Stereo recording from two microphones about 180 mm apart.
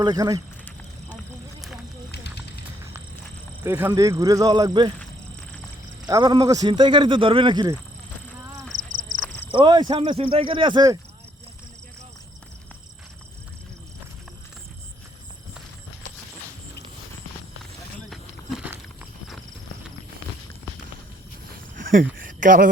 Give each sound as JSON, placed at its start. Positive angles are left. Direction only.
{"t": 0.0, "sound": "speech", "side_deg": -20}
{"t": 3.6, "sound": "speech", "side_deg": -10}
{"t": 6.1, "sound": "speech", "side_deg": -20}
{"t": 8.8, "sound": "horse", "side_deg": -45}
{"t": 9.5, "sound": "speech", "side_deg": -25}
{"t": 18.1, "sound": "a sound", "side_deg": 0}
{"t": 21.8, "sound": "a sound", "side_deg": -50}